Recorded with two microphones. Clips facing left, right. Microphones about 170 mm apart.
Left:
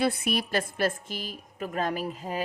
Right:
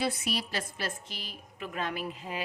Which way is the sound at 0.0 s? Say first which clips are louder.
Left 5 dB; 55° left (ahead or behind).